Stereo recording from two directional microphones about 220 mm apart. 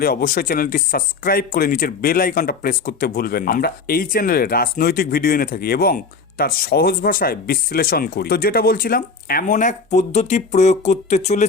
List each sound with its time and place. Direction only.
0.0 s speech: 40° left (ahead or behind)